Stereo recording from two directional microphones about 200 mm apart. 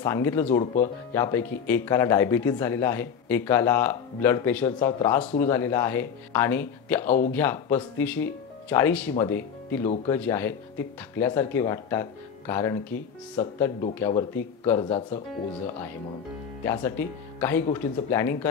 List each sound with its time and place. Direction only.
0.0 s speech: 10° left (ahead or behind)
15.0 s speech: 30° left (ahead or behind)
16.8 s speech: 10° left (ahead or behind)